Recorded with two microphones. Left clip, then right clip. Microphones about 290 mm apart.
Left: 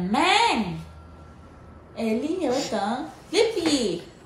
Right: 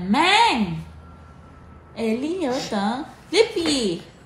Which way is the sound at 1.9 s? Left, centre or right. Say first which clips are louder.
Right 2 dB; right.